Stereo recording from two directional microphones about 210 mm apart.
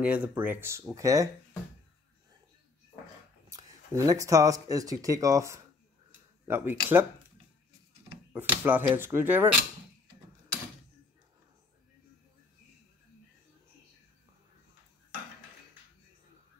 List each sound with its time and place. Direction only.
0.0 s speech: 5° right (ahead or behind)
3.4 s speech: 15° right (ahead or behind)
8.3 s speech: 10° right (ahead or behind)